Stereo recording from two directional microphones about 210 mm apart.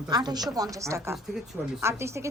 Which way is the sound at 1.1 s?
Centre (ahead or behind).